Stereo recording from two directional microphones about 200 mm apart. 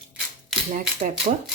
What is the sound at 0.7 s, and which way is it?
Dishes, 40° right (ahead or behind).